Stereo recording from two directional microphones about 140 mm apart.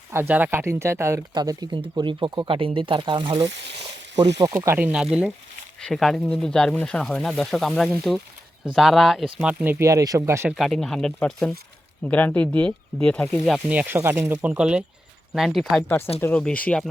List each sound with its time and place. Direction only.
0.1 s speech: 15° right (ahead or behind)
4.5 s speech: 15° right (ahead or behind)
5.8 s speech: centre (ahead or behind); by 10.5 s 20° right (ahead or behind)
10.5 s speech: centre (ahead or behind)
13.7 s speech: 15° right (ahead or behind); by 16.9 s 5° left (ahead or behind)